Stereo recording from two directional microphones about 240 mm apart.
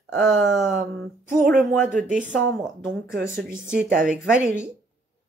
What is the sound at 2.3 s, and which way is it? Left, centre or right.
Speech, centre.